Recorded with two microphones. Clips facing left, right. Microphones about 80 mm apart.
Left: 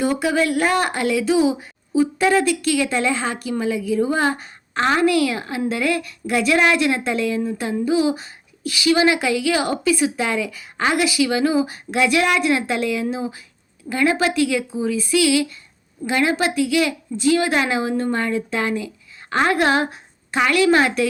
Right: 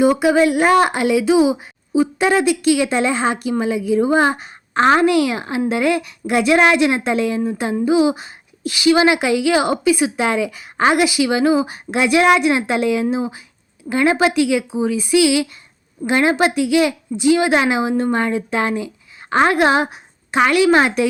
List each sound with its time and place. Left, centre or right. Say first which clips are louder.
0.0 s a woman's voice: right 6 dB; centre